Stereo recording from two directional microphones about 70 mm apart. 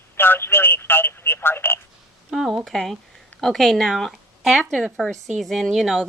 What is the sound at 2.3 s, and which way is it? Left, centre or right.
A woman's voice, centre.